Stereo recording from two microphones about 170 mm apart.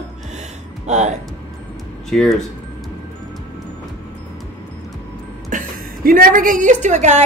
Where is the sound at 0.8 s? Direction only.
45° right (ahead or behind).